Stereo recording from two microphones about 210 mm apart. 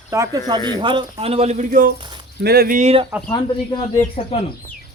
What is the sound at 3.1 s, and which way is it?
Speech, 10° right (ahead or behind).